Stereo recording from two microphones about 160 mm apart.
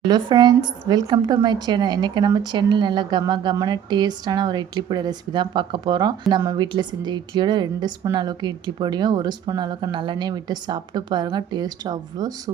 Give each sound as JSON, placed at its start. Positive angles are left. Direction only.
{"t": 0.1, "sound": "a woman's voice", "side_deg": -25}